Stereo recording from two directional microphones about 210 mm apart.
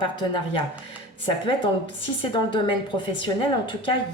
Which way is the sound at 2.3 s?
25° left (ahead or behind).